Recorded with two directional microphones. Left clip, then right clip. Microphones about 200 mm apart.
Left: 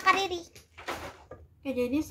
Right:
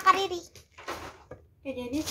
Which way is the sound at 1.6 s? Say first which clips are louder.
Left 5 dB; 40° left (ahead or behind).